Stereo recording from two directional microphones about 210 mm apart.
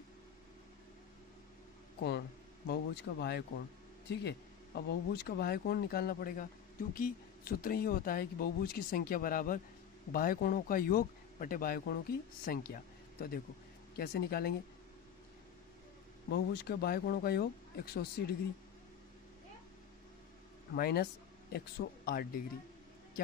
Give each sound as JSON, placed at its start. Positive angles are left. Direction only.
{"t": 2.0, "sound": "speech", "side_deg": 55}
{"t": 16.3, "sound": "speech", "side_deg": 50}
{"t": 20.7, "sound": "speech", "side_deg": 45}